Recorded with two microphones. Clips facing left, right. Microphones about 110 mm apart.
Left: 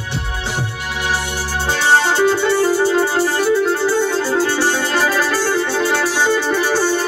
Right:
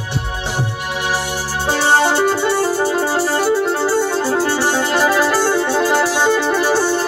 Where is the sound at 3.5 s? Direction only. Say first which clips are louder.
Even; 25° right (ahead or behind).